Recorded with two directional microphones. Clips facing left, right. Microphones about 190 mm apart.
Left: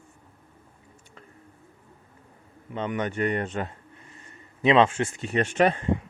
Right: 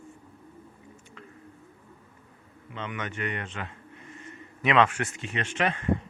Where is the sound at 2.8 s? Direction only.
40° left (ahead or behind).